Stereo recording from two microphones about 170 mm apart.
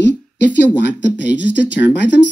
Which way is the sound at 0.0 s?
90° left.